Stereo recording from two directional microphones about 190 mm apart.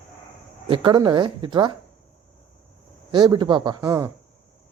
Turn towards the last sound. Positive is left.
turn(degrees=-15)  # may be behind; listen again after turning